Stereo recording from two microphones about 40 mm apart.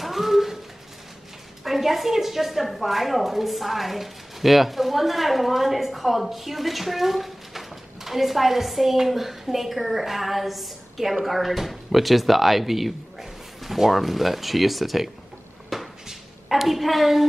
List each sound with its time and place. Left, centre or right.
0.0 s dog: centre
1.6 s a woman's voice: centre
15.7 s cupboard open or close: centre
16.1 s a sound: centre